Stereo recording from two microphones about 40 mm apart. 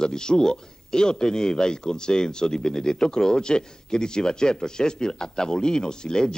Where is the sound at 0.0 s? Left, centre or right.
Centre.